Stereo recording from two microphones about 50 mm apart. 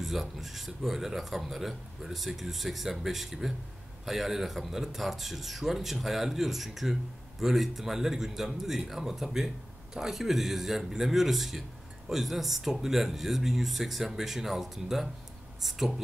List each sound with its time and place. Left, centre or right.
0.0 s speech: centre